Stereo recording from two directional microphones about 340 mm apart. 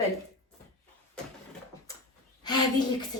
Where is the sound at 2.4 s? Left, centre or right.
Centre.